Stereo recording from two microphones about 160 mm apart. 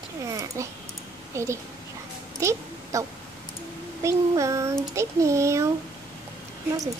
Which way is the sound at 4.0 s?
20° right (ahead or behind).